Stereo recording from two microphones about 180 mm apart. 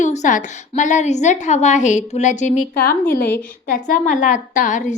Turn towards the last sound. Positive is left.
turn(degrees=45)  # may be behind; listen again after turning